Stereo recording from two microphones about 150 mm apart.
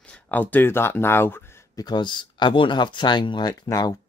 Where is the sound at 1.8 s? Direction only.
30° left (ahead or behind).